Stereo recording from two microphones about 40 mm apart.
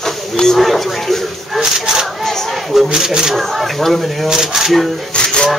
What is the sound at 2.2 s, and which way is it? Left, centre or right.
Crowd, centre.